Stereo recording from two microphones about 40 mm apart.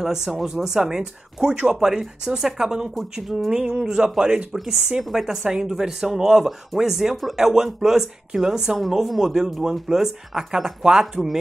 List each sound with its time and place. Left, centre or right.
0.0 s speech: centre
1.5 s speech: right
1.8 s speech: centre
3.2 s speech: centre
9.2 s speech: centre
9.5 s speech: centre